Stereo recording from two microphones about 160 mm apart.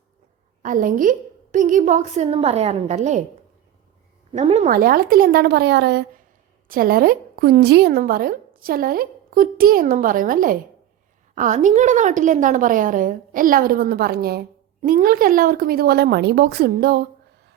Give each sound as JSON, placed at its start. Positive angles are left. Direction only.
{"t": 0.6, "sound": "a woman's voice", "side_deg": -55}
{"t": 4.3, "sound": "a woman's voice", "side_deg": -40}
{"t": 4.7, "sound": "speech", "side_deg": -65}
{"t": 6.7, "sound": "a woman's voice", "side_deg": -65}